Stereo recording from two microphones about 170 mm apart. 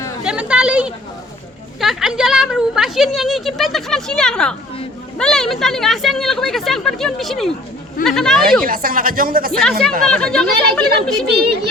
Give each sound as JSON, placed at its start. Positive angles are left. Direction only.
{"t": 0.3, "sound": "a sound", "side_deg": -5}
{"t": 1.8, "sound": "speech", "side_deg": 0}
{"t": 8.4, "sound": "a woman's voice", "side_deg": -55}
{"t": 9.5, "sound": "speech", "side_deg": 5}